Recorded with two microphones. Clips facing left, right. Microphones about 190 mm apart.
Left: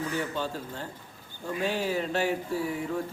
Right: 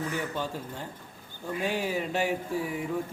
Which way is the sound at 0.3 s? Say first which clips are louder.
Left 1 dB; 15° right (ahead or behind).